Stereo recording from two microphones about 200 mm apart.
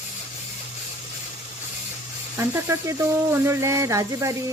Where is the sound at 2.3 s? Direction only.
15° right (ahead or behind).